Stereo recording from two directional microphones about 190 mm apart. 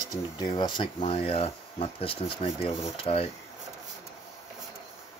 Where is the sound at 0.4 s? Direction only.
25° left (ahead or behind).